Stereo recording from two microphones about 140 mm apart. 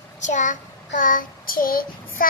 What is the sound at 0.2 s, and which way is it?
Child singing, 60° left (ahead or behind).